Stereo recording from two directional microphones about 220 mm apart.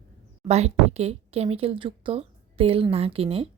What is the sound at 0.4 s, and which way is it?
A woman's voice, 30° right (ahead or behind).